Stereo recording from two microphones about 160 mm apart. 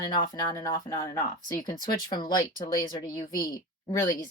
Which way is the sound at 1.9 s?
25° left (ahead or behind).